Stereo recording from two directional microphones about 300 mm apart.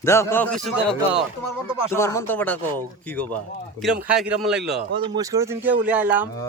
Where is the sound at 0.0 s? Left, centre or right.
Centre.